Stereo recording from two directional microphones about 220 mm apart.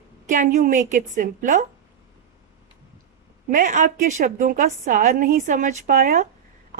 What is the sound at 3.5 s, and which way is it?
A woman's voice, 35° right (ahead or behind).